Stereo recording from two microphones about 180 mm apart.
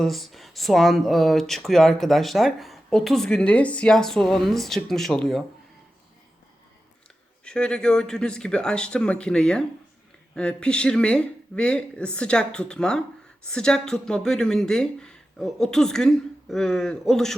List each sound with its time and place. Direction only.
0.0 s speech: centre (ahead or behind)
7.4 s speech: 5° left (ahead or behind)